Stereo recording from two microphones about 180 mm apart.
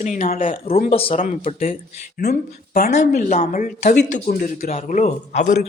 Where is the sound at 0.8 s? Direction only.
35° left (ahead or behind).